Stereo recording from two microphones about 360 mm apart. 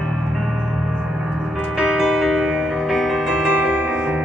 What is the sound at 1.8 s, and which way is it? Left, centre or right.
Music, centre.